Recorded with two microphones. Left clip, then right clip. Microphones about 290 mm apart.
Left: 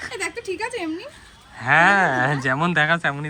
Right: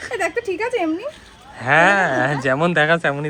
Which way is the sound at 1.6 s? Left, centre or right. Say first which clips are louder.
Right 1 dB; centre.